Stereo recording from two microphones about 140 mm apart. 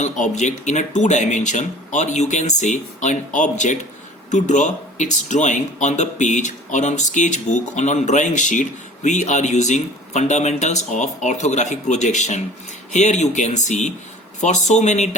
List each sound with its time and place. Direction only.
0.0 s speech: 60° left (ahead or behind)